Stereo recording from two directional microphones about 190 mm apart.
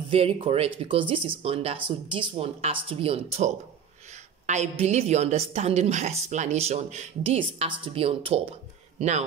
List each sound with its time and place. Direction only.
0.1 s a woman's voice: 30° right (ahead or behind)